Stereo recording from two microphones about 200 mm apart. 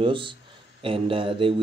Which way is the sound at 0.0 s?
25° right (ahead or behind).